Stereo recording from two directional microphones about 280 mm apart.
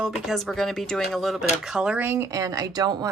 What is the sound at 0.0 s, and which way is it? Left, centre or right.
Speech, centre.